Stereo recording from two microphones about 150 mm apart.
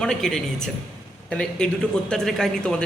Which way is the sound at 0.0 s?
5° left (ahead or behind).